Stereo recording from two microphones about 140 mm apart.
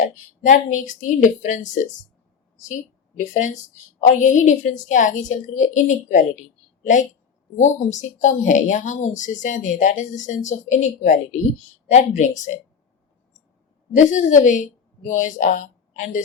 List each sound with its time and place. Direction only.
0.0 s a woman's voice: 65° left (ahead or behind)
3.2 s a woman's voice: 60° left (ahead or behind)
13.9 s a woman's voice: 60° left (ahead or behind)